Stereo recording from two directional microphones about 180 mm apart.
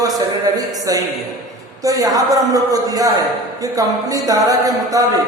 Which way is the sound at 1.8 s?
20° right (ahead or behind).